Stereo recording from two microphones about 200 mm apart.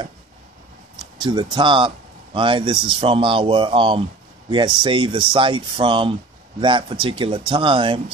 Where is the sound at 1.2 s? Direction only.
20° right (ahead or behind).